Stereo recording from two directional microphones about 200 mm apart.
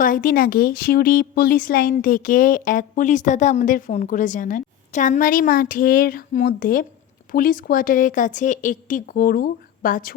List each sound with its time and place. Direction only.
0.0 s a woman's voice: 45° left (ahead or behind)